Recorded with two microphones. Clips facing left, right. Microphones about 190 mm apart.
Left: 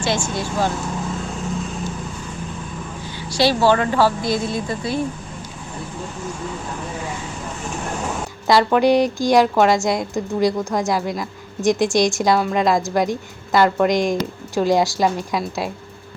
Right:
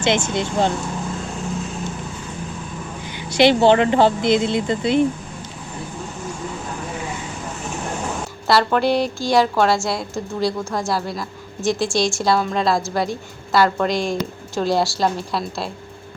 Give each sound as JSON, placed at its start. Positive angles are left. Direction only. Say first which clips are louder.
{"t": 0.0, "sound": "speech", "louder": "right 3 dB", "side_deg": -20}
{"t": 3.2, "sound": "speech", "louder": "right 3 dB", "side_deg": -20}
{"t": 8.4, "sound": "a woman's voice", "louder": "left 3 dB", "side_deg": 15}